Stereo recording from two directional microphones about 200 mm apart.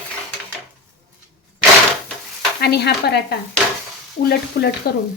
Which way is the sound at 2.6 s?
55° left (ahead or behind).